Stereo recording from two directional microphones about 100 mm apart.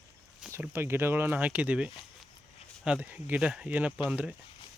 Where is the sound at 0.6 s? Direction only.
25° right (ahead or behind).